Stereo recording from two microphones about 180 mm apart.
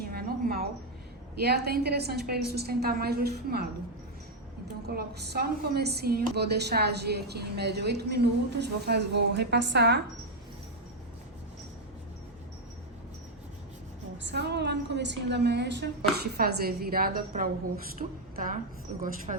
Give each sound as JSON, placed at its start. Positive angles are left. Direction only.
{"t": 0.0, "sound": "music", "side_deg": -55}
{"t": 1.4, "sound": "a woman's voice", "side_deg": -60}
{"t": 4.9, "sound": "a woman's voice", "side_deg": -65}
{"t": 14.2, "sound": "a woman's voice", "side_deg": -75}